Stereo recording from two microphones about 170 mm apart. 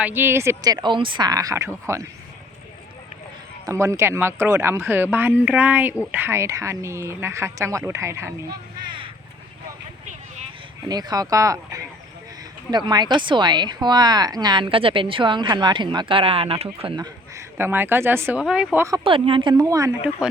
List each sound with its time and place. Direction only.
0.0 s a woman's voice: 10° right (ahead or behind)
3.7 s speech: 15° right (ahead or behind)
10.8 s a woman's voice: 25° right (ahead or behind)
19.0 s a woman's voice: 30° right (ahead or behind)
20.2 s speech: 5° right (ahead or behind)